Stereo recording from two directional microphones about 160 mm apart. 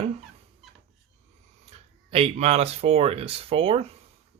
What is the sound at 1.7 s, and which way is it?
Speech, 35° right (ahead or behind).